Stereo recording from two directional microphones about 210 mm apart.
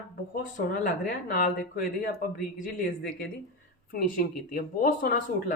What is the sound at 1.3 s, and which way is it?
Speech, 40° left (ahead or behind).